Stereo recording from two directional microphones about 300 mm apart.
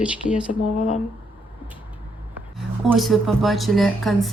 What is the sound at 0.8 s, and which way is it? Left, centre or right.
Speech, left.